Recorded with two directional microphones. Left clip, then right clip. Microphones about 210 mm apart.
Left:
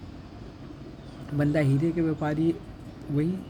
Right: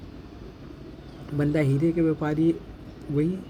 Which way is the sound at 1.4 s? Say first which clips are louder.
Right 1 dB; centre (ahead or behind).